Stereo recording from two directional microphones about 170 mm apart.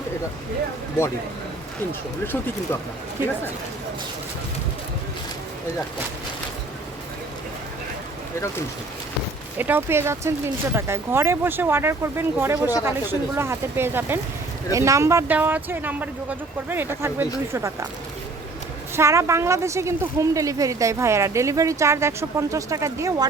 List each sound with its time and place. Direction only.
9.6 s a woman's voice: 10° right (ahead or behind)
18.9 s a woman's voice: 15° right (ahead or behind)